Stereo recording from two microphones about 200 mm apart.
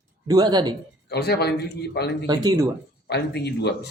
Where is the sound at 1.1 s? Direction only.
55° left (ahead or behind).